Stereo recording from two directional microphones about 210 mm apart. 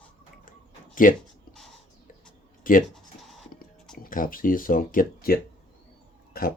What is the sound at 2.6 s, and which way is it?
Speech, 40° left (ahead or behind).